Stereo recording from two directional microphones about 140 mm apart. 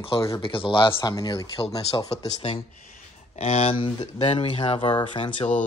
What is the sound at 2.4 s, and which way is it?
Speech, 40° left (ahead or behind).